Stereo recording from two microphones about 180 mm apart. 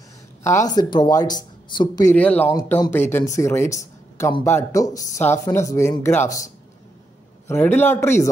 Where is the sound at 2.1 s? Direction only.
10° left (ahead or behind).